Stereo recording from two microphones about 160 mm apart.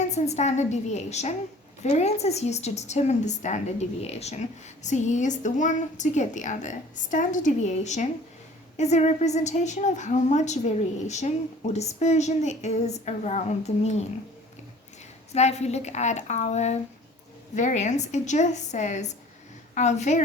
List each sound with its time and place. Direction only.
0.0 s a woman's voice: 45° left (ahead or behind)
15.3 s a woman's voice: 45° left (ahead or behind)